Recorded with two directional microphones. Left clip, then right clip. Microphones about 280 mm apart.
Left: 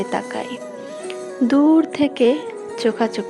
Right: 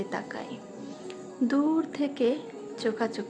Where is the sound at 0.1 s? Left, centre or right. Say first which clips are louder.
Left 11 dB; left.